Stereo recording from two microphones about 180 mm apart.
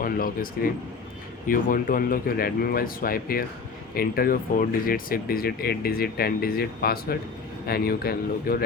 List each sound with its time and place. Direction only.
0.0 s speech: 55° left (ahead or behind)